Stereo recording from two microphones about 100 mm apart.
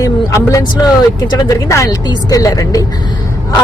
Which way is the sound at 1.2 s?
45° left (ahead or behind).